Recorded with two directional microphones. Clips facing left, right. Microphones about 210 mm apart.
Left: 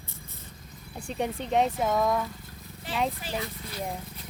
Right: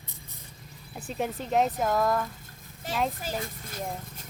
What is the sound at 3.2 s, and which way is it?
Speech, 45° right (ahead or behind).